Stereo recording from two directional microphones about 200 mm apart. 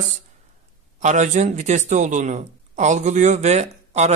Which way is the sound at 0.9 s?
35° right (ahead or behind).